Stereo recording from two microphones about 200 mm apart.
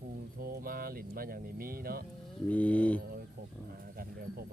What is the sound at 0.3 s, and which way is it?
Speech, 50° right (ahead or behind).